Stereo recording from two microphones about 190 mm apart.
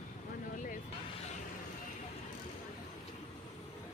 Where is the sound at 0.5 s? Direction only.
45° left (ahead or behind).